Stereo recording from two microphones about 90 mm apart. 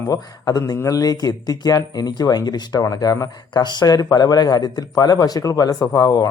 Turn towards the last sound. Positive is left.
turn(degrees=45)  # may be behind; listen again after turning